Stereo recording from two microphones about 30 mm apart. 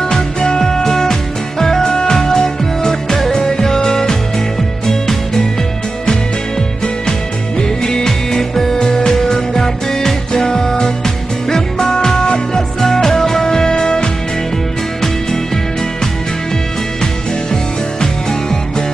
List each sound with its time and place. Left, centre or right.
0.1 s music: left
7.8 s music: left